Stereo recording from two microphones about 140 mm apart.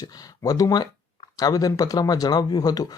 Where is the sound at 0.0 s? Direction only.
25° left (ahead or behind).